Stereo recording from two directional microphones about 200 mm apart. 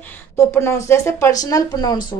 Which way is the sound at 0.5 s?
15° left (ahead or behind).